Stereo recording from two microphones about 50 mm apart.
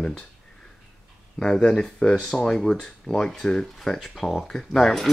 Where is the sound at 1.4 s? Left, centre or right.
Centre.